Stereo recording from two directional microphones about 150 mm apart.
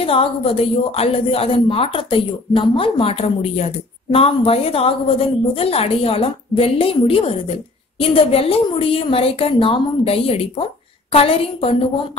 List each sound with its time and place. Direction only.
0.0 s speech: 40° left (ahead or behind)